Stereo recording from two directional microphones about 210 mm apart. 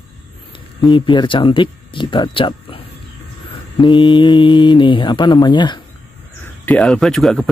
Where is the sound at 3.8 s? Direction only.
20° left (ahead or behind).